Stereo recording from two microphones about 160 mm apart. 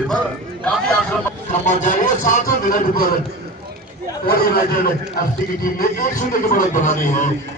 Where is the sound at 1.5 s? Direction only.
50° left (ahead or behind).